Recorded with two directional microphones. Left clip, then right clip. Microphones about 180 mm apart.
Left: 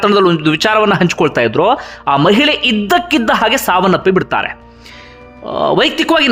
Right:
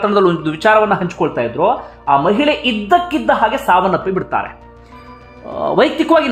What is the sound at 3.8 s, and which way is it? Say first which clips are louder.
A man's voice: left 4 dB; 25° left (ahead or behind).